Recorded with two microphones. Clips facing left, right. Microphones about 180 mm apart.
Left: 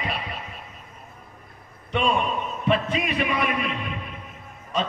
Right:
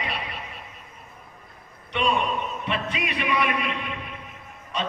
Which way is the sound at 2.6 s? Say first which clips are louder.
Left 5 dB; 45° left (ahead or behind).